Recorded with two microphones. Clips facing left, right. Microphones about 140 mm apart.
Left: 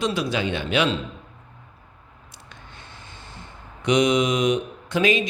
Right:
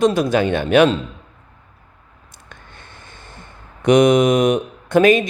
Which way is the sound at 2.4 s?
50° right (ahead or behind).